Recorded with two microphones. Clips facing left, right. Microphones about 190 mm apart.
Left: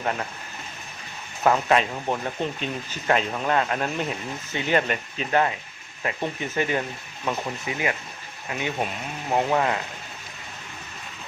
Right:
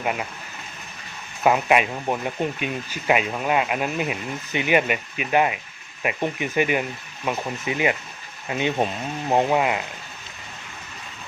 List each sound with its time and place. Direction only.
0.0 s speech: 10° right (ahead or behind)
1.5 s speech: 10° right (ahead or behind)